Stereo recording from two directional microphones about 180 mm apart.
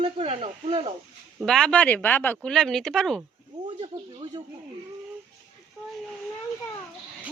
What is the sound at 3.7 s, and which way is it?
Speech, 25° right (ahead or behind).